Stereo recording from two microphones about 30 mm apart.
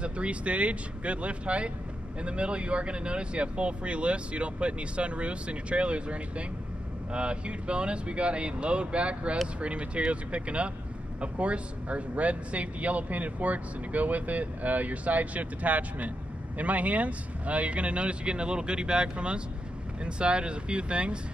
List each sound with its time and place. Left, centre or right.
0.0 s speech: right